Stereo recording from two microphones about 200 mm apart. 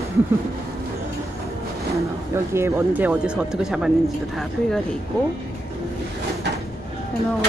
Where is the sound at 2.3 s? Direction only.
15° right (ahead or behind).